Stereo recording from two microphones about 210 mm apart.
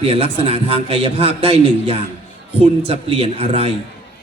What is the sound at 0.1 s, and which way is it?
A man's voice, 25° right (ahead or behind).